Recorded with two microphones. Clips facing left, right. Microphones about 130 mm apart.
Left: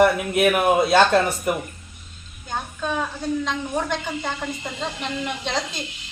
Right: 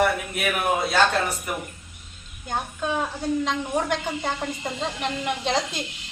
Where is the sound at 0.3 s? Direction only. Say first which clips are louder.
Left 7 dB; 90° left.